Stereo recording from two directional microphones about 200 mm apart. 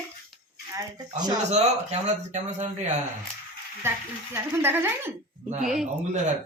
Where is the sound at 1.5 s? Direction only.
35° right (ahead or behind).